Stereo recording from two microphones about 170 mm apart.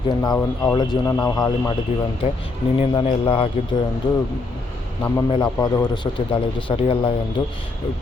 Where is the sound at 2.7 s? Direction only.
30° left (ahead or behind).